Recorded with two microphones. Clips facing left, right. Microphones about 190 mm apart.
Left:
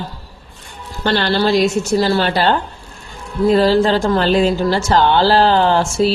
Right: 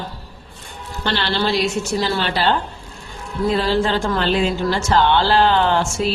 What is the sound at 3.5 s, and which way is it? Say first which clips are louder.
A woman's voice: left 6 dB; 40° left (ahead or behind).